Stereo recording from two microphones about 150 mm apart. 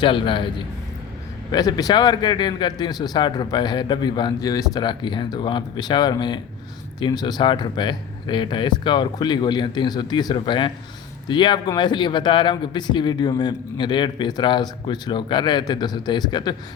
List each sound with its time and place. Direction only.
0.0 s a man's voice: 35° left (ahead or behind)